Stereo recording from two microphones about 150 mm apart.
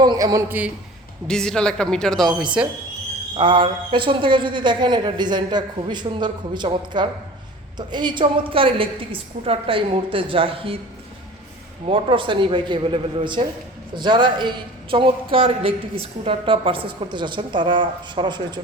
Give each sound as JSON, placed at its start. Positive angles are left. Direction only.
{"t": 0.0, "sound": "a man's voice", "side_deg": -25}
{"t": 1.3, "sound": "speech", "side_deg": 5}
{"t": 3.3, "sound": "a man's voice", "side_deg": -35}
{"t": 11.9, "sound": "a man's voice", "side_deg": -35}